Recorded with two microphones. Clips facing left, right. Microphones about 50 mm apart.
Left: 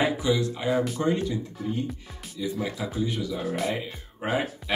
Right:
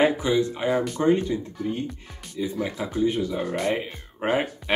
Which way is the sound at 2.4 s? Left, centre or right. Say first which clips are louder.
Right 2 dB; right.